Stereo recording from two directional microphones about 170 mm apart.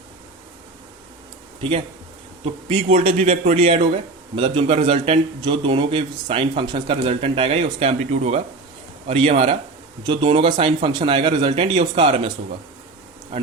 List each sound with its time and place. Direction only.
2.4 s a man's voice: 35° right (ahead or behind)